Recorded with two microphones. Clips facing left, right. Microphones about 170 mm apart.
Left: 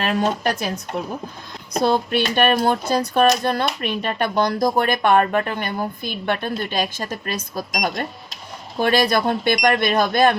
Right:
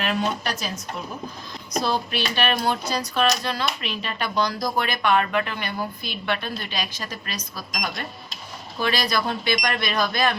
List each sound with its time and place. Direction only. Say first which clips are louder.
0.0 s speech: left 5 dB; 45° left (ahead or behind)
1.7 s speech: left 6 dB; 55° left (ahead or behind)